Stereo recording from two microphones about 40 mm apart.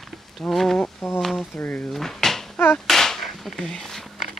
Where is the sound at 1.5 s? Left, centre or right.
Left.